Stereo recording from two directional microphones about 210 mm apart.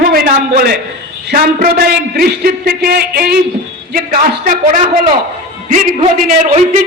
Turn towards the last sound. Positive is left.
turn(degrees=-35)  # may be behind; listen again after turning